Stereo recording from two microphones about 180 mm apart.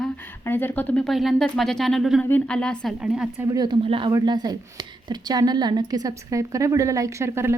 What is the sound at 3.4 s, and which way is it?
A woman's voice, 20° right (ahead or behind).